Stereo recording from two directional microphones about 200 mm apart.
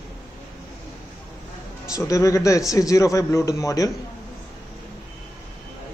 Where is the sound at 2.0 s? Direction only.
15° left (ahead or behind).